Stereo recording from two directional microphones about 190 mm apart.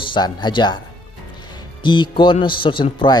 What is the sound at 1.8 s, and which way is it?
A man's voice, 25° left (ahead or behind).